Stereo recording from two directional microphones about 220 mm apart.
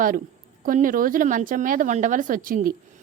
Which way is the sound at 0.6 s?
40° right (ahead or behind).